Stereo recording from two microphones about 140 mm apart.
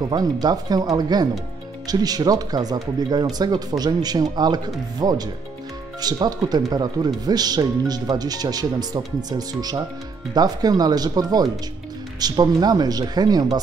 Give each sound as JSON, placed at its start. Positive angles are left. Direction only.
{"t": 0.0, "sound": "speech", "side_deg": -30}